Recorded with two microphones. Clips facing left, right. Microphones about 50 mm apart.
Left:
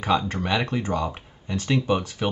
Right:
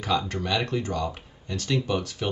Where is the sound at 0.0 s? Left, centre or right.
Left.